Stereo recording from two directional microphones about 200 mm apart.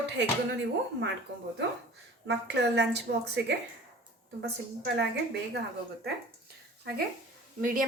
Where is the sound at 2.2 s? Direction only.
60° right (ahead or behind).